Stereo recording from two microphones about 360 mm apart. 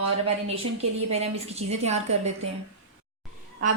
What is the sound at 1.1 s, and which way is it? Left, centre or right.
A woman's voice, centre.